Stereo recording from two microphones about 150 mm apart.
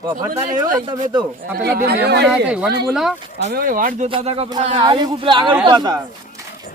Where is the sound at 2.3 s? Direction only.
10° right (ahead or behind).